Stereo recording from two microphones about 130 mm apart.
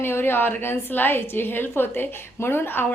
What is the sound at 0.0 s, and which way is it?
A woman's voice, 15° left (ahead or behind).